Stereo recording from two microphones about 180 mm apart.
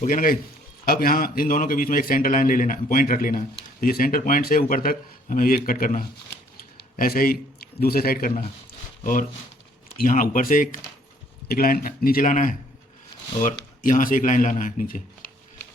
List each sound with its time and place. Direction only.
0.0 s a man's voice: 50° left (ahead or behind)
10.0 s a man's voice: 50° left (ahead or behind)